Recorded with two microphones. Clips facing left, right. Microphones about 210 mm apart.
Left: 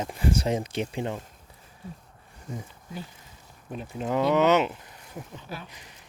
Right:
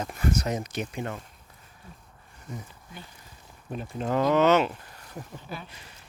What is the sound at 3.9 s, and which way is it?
Speech, 10° left (ahead or behind).